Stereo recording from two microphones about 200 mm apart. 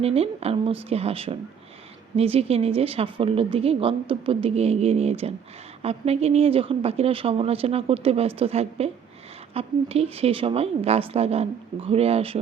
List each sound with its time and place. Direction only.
0.0 s a woman's voice: 30° right (ahead or behind)